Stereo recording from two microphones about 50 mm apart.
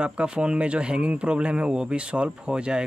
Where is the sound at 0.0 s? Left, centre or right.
Centre.